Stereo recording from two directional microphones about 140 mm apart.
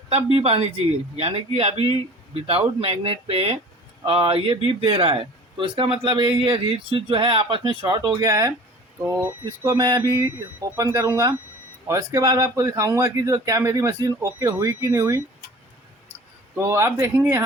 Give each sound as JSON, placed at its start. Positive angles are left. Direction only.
{"t": 0.1, "sound": "a man's voice", "side_deg": -45}
{"t": 9.6, "sound": "speech", "side_deg": -25}
{"t": 16.6, "sound": "speech", "side_deg": -20}